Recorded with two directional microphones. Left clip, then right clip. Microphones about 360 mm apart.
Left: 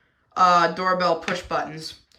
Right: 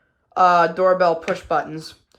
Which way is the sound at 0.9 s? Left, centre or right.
Centre.